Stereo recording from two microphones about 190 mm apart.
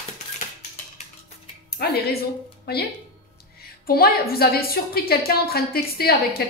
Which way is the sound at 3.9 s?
55° left (ahead or behind).